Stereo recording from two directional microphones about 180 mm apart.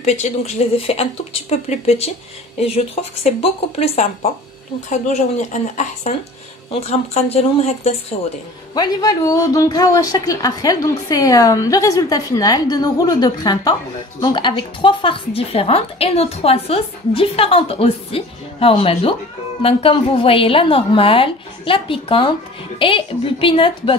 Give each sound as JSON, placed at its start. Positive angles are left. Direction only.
{"t": 0.0, "sound": "a woman's voice", "side_deg": 40}
{"t": 8.7, "sound": "a woman's voice", "side_deg": 20}